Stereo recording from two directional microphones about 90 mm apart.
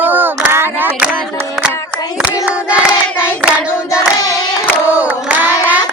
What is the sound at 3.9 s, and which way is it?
Singing, 45° left (ahead or behind).